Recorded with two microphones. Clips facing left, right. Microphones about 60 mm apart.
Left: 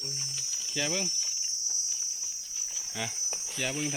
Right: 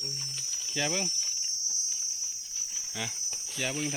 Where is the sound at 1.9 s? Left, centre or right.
Centre.